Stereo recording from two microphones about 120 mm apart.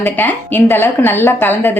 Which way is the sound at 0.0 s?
15° left (ahead or behind).